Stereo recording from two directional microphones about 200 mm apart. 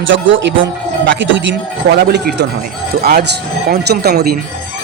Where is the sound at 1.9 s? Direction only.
55° right (ahead or behind).